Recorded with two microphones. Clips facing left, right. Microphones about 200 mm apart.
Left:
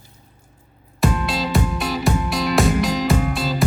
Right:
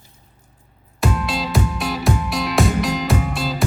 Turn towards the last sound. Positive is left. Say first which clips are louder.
# left 2 dB
turn(degrees=0)  # may be behind; listen again after turning